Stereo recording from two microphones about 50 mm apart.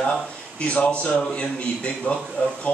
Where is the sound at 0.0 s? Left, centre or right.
Left.